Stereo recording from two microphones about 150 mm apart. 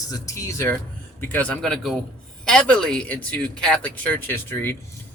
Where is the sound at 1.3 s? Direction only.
10° left (ahead or behind).